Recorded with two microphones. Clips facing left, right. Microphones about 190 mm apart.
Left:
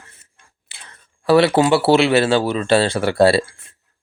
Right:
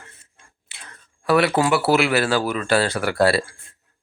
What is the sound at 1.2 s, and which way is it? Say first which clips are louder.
Speech: left 5 dB; 30° left (ahead or behind).